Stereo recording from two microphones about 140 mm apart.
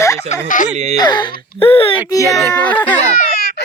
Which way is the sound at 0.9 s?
30° left (ahead or behind).